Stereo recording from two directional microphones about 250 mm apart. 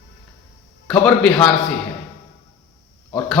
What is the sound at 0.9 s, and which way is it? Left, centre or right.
Speech, centre.